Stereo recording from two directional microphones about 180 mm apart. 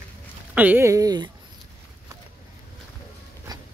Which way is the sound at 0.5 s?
10° right (ahead or behind).